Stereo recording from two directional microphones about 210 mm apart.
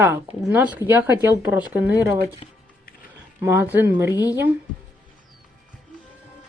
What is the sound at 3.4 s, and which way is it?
Speech, 10° right (ahead or behind).